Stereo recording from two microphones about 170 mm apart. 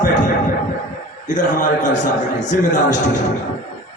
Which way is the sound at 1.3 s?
50° left (ahead or behind).